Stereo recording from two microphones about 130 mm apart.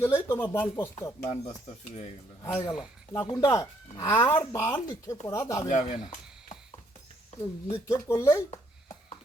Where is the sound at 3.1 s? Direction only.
20° left (ahead or behind).